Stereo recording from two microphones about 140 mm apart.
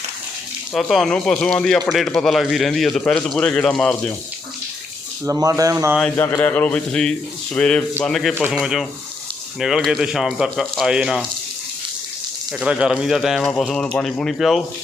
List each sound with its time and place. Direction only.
0.7 s speech: centre (ahead or behind)
5.2 s speech: 20° right (ahead or behind)
6.1 s speech: 20° left (ahead or behind); by 11.3 s 5° right (ahead or behind)
12.5 s speech: 5° right (ahead or behind)